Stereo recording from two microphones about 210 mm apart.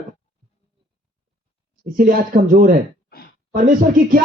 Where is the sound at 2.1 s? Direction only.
40° right (ahead or behind).